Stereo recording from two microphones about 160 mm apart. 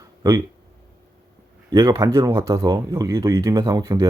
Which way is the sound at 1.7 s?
20° right (ahead or behind).